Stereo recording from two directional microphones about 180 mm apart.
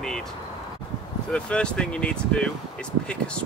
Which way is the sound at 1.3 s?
5° left (ahead or behind).